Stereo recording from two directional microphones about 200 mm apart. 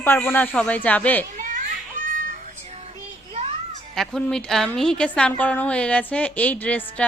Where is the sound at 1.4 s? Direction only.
40° right (ahead or behind).